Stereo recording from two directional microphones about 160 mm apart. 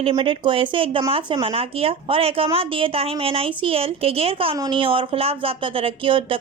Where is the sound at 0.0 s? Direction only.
35° right (ahead or behind).